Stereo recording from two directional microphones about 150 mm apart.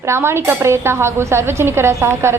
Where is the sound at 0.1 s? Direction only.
15° right (ahead or behind).